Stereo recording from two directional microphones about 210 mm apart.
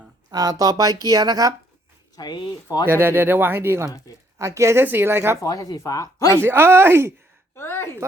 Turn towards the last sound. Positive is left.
turn(degrees=10)  # may be behind; listen again after turning